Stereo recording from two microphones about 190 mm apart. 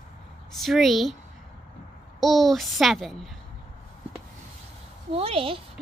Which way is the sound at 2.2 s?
Centre (ahead or behind).